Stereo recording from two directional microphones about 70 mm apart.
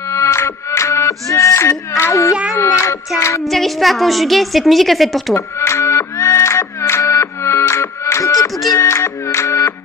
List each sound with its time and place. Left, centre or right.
0.1 s music: left
2.5 s child singing: left
3.4 s a woman's voice: centre
5.3 s music: left